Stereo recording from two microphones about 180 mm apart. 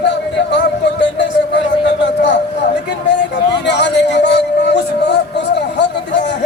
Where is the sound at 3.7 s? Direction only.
75° left (ahead or behind).